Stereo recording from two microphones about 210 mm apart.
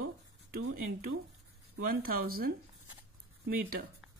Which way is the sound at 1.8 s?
45° right (ahead or behind).